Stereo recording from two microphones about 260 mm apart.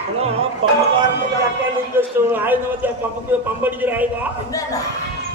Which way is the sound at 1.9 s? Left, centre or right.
Centre.